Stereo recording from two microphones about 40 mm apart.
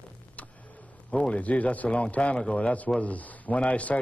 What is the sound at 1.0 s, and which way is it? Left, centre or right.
Speech, left.